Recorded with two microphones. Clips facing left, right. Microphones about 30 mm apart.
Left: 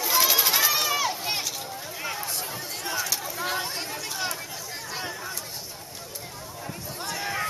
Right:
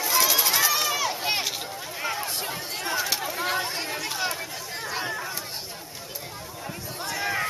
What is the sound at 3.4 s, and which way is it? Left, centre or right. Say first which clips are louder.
Chatter: right 1 dB; centre.